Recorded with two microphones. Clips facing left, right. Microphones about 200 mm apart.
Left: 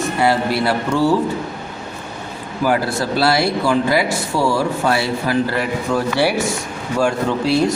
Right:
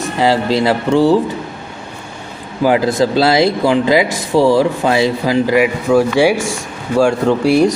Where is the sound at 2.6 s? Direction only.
15° right (ahead or behind).